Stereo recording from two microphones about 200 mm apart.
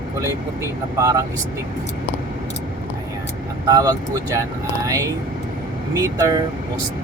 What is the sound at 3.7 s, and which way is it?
Speech, 20° right (ahead or behind).